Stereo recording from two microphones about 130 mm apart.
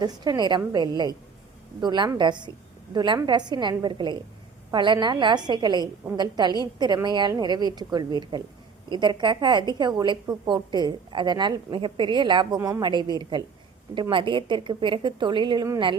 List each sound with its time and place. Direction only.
0.0 s a woman's voice: 35° right (ahead or behind)